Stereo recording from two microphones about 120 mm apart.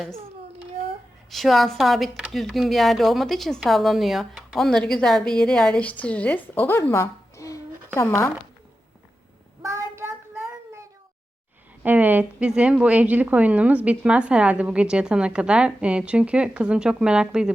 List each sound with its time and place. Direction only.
1.3 s speech: centre (ahead or behind); by 8.3 s 20° left (ahead or behind)
9.6 s child singing: 25° right (ahead or behind)
11.8 s a woman's voice: 15° right (ahead or behind)